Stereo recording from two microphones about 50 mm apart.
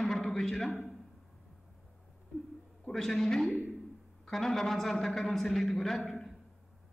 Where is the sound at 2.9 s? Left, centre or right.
Centre.